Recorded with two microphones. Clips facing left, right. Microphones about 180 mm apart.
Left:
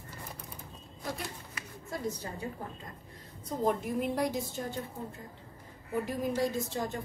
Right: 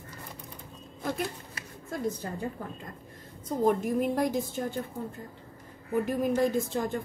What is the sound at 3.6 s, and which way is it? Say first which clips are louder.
Speech: right 5 dB; 50° right (ahead or behind).